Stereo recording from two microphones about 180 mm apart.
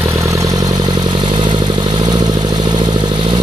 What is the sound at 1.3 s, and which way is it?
Motorcycle, 25° right (ahead or behind).